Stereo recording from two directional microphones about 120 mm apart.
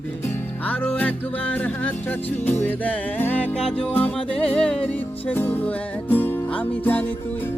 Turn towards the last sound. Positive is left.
turn(degrees=15)  # may be behind; listen again after turning